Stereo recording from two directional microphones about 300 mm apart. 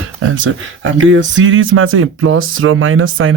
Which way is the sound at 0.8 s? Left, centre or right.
Right.